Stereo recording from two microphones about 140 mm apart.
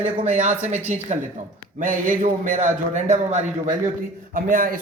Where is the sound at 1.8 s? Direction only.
70° right (ahead or behind).